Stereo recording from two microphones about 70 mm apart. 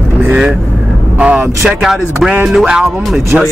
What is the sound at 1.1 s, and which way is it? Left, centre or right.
Speech, centre.